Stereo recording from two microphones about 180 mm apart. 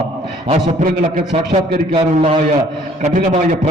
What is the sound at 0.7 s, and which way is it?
Speech, 50° right (ahead or behind).